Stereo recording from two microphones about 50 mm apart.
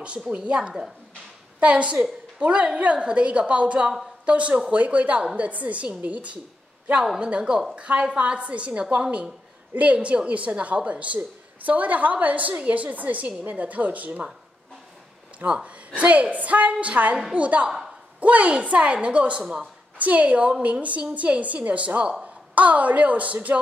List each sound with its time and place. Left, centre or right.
0.3 s a woman's voice: right
15.3 s a woman's voice: right